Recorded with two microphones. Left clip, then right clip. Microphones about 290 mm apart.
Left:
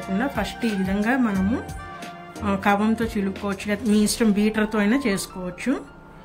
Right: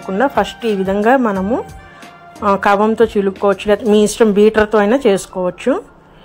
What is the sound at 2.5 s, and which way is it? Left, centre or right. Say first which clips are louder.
Speech: right 8 dB; right.